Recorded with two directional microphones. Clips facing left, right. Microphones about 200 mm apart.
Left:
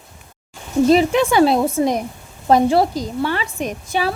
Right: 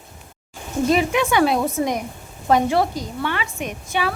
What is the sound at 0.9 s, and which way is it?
A woman's voice, 35° left (ahead or behind).